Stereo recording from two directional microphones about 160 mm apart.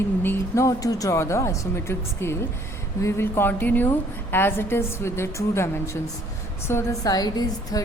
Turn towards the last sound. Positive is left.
turn(degrees=25)  # may be behind; listen again after turning